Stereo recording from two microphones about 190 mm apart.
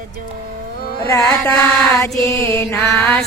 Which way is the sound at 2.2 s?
15° left (ahead or behind).